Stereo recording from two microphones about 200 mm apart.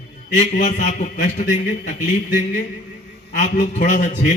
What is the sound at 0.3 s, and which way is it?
A man's voice, 40° left (ahead or behind).